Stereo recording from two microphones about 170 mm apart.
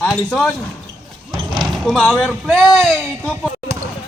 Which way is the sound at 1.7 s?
Centre (ahead or behind).